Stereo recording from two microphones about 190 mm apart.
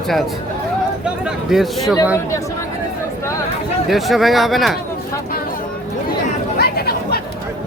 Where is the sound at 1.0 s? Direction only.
5° right (ahead or behind).